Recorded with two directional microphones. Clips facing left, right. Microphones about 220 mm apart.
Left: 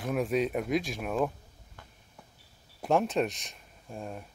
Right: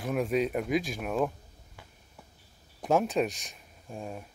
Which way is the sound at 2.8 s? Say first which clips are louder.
Right 1 dB; centre (ahead or behind).